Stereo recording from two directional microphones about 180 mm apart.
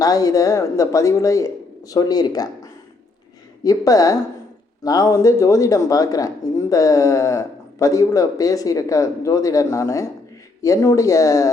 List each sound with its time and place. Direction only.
0.0 s speech: 20° left (ahead or behind)
3.6 s speech: 20° left (ahead or behind)